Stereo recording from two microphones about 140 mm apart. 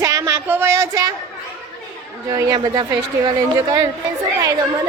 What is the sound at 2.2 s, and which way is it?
A woman's voice, 20° right (ahead or behind).